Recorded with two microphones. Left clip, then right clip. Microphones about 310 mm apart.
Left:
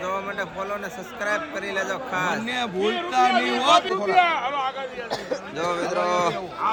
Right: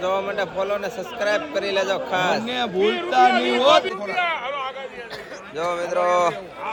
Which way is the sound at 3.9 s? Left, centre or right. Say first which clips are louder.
Left 4 dB; left.